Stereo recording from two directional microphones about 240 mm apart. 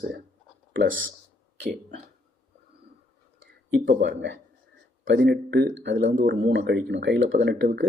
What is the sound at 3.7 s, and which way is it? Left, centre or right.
Speech, right.